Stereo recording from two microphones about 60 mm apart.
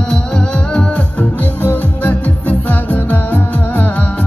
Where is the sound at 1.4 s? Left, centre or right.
Left.